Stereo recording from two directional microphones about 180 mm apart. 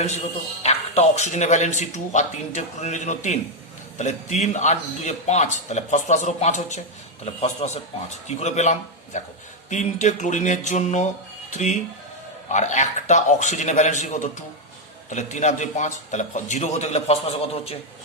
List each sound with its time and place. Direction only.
0.6 s speech: 35° left (ahead or behind)